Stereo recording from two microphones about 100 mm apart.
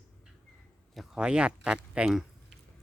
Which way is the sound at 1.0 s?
10° right (ahead or behind).